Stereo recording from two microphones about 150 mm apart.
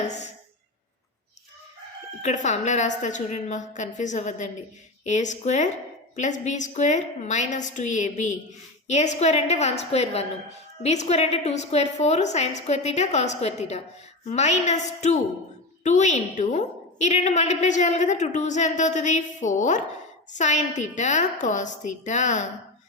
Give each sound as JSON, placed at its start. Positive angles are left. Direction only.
{"t": 2.2, "sound": "a woman's voice", "side_deg": 50}